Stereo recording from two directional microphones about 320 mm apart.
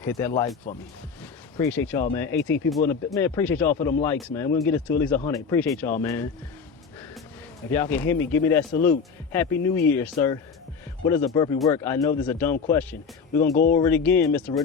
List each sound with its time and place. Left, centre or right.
0.0 s speech: centre
7.7 s speech: centre
13.6 s speech: left
13.8 s speech: centre